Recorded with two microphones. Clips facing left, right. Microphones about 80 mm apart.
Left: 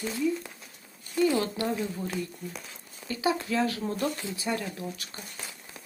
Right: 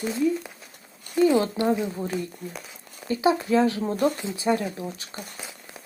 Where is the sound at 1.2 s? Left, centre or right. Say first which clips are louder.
Right 5 dB; right.